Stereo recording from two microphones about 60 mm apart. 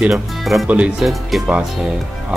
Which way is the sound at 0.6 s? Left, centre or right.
Right.